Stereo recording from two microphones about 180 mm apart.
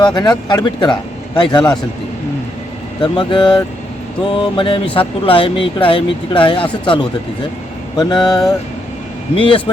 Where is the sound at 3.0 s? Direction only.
25° left (ahead or behind).